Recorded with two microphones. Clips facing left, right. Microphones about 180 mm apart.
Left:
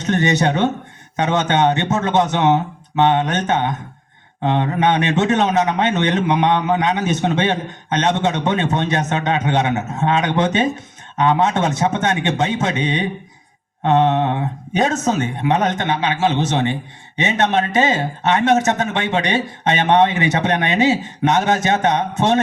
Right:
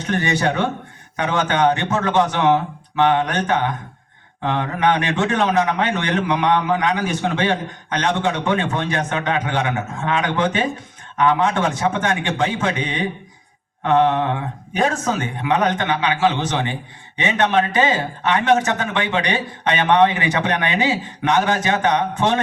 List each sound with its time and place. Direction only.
0.0 s a man's voice: 25° left (ahead or behind)